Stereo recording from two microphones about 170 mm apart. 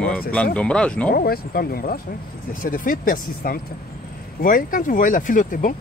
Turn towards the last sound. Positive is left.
turn(degrees=50)  # may be behind; listen again after turning